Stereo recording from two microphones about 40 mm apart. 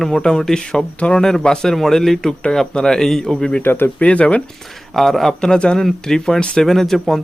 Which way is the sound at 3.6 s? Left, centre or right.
Left.